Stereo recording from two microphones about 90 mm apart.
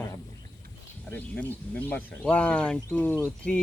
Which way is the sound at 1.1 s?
15° left (ahead or behind).